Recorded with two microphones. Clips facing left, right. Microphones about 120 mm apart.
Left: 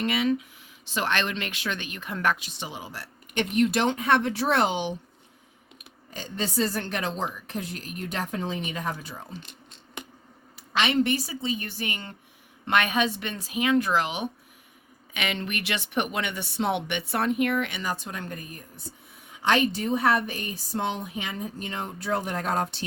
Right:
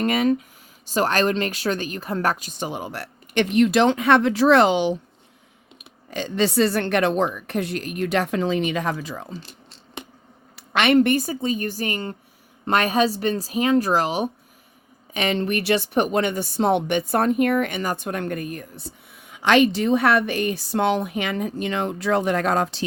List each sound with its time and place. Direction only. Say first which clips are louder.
0.0 s speech: right 5 dB; 45° right (ahead or behind); by 4.9 s 90° right
6.1 s a woman's voice: right 10 dB; 90° right
9.4 s a sound: right 3 dB; 30° right (ahead or behind)
10.5 s speech: right 7 dB; 60° right (ahead or behind); by 22.8 s 90° right